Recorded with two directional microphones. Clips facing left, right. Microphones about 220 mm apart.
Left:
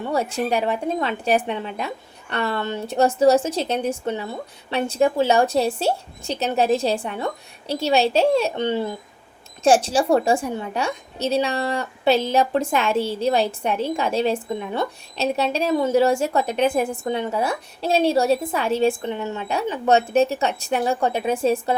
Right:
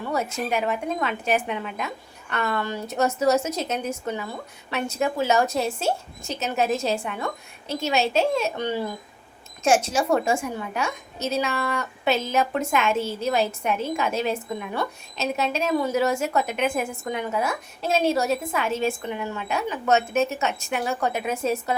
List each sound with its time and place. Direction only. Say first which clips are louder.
0.1 s a woman's voice: left 4 dB; 30° left (ahead or behind)